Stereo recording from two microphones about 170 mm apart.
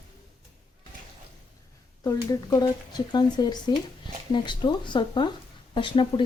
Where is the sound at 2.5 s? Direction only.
25° left (ahead or behind).